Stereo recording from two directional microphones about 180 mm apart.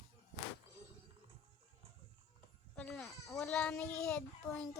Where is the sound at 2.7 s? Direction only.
5° left (ahead or behind).